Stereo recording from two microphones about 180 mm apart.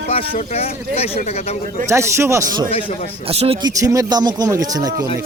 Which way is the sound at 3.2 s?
35° right (ahead or behind).